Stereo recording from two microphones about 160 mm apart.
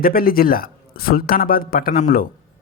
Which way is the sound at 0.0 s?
65° left (ahead or behind).